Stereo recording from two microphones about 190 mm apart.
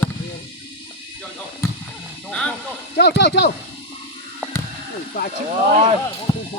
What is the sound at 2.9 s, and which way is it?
Speech, 60° left (ahead or behind).